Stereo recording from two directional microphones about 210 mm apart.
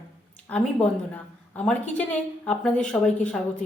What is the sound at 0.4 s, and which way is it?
A woman's voice, 5° left (ahead or behind).